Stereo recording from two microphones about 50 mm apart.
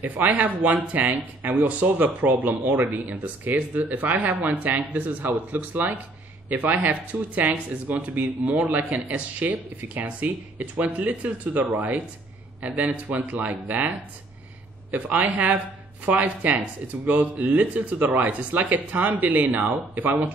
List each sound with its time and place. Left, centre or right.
0.0 s speech: right